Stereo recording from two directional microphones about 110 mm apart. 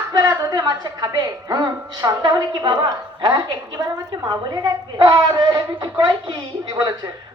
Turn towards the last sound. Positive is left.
turn(degrees=-40)  # may be behind; listen again after turning